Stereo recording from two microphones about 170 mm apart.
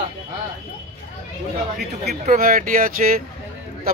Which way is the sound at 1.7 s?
60° right (ahead or behind).